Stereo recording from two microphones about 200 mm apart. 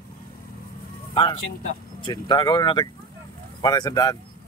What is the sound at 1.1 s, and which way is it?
A man's voice, 25° left (ahead or behind).